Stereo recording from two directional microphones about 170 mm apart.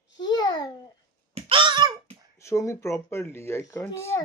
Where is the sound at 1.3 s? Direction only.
30° right (ahead or behind).